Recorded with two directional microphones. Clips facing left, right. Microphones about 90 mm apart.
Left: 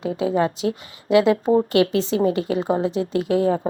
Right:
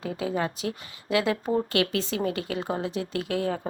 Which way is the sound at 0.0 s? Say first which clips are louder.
Left 8 dB; 30° left (ahead or behind).